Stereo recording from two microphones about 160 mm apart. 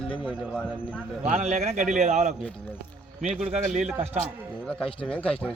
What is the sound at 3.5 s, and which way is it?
Speech, 50° right (ahead or behind).